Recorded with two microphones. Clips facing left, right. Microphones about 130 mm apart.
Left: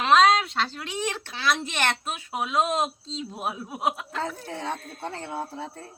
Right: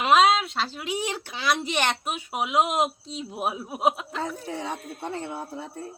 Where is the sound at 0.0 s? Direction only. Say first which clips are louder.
Even; 5° right (ahead or behind).